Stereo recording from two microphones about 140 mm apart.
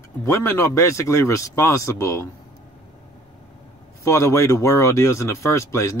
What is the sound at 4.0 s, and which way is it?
Speech, 20° left (ahead or behind).